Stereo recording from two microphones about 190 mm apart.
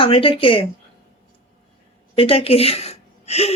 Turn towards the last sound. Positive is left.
turn(degrees=35)  # may be behind; listen again after turning